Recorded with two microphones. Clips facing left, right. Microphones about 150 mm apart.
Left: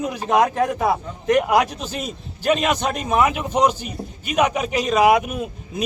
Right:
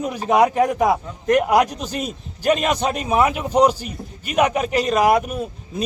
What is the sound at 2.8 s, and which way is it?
A man's voice, 5° right (ahead or behind).